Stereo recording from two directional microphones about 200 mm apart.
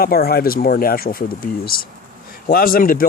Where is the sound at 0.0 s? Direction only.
50° left (ahead or behind).